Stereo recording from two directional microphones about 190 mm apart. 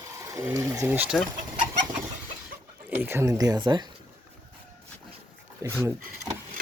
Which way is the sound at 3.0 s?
15° right (ahead or behind).